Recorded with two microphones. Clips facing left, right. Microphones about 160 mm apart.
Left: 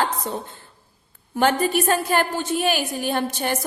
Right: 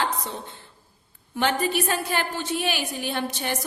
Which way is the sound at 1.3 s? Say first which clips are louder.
Left 4 dB; 45° left (ahead or behind).